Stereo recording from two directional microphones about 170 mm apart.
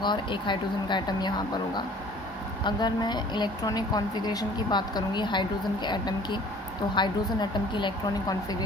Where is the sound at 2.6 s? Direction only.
25° left (ahead or behind).